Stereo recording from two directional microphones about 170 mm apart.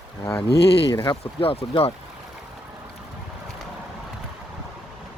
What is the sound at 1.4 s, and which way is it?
Speech, 35° left (ahead or behind).